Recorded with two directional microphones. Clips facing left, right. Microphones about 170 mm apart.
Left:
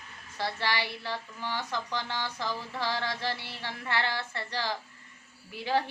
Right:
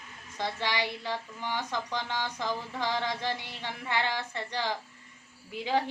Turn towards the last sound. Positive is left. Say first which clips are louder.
# even
turn(degrees=-15)  # may be behind; listen again after turning